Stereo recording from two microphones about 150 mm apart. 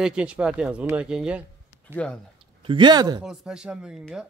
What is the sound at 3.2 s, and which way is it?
Speech, 5° right (ahead or behind).